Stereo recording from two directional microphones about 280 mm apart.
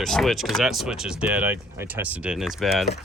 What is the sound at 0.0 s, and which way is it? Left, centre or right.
Speech, centre.